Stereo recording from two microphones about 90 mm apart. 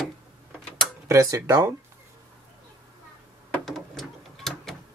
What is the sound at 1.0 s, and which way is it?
Speech, 35° right (ahead or behind).